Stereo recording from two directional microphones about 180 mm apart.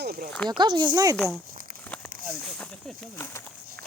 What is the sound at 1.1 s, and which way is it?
Speech, centre (ahead or behind).